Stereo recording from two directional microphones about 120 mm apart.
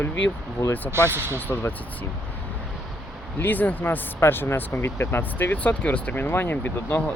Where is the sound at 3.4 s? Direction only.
15° left (ahead or behind).